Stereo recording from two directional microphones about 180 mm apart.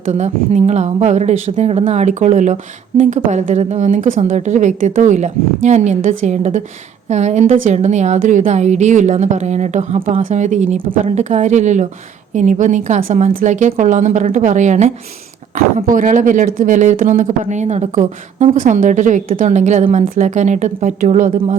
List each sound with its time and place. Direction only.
0.0 s a woman's voice: 40° right (ahead or behind)